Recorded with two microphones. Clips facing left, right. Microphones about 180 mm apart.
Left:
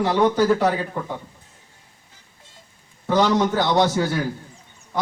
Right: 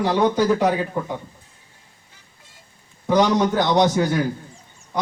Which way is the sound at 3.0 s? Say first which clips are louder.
Right 1 dB; 15° right (ahead or behind).